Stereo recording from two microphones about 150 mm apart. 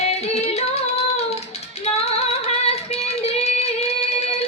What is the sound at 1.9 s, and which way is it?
Female singing, 45° left (ahead or behind).